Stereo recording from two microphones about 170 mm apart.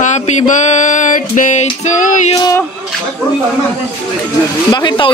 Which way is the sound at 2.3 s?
20° left (ahead or behind).